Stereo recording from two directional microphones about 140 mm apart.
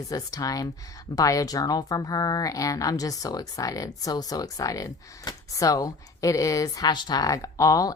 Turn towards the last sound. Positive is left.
turn(degrees=25)  # may be behind; listen again after turning